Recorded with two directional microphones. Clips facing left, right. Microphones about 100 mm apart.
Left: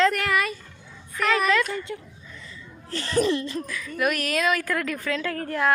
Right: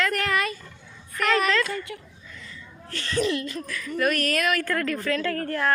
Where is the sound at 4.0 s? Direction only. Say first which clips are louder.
Even; 10° left (ahead or behind).